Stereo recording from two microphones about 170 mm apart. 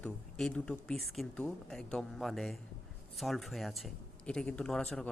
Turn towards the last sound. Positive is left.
turn(degrees=5)  # may be behind; listen again after turning